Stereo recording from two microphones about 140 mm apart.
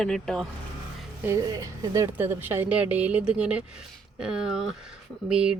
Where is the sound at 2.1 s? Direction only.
15° right (ahead or behind).